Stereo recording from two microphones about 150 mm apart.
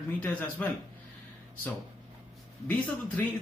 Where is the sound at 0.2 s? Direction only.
10° left (ahead or behind).